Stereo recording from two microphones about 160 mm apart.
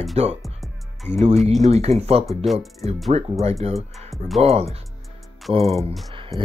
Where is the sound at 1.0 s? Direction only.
40° right (ahead or behind).